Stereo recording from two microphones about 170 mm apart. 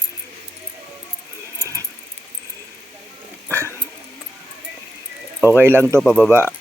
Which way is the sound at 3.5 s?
15° right (ahead or behind).